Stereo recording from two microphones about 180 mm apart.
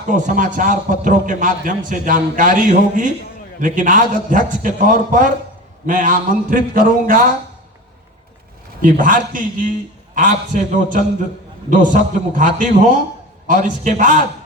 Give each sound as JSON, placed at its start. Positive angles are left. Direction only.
{"t": 0.1, "sound": "a man's voice", "side_deg": -45}
{"t": 8.8, "sound": "a man's voice", "side_deg": -50}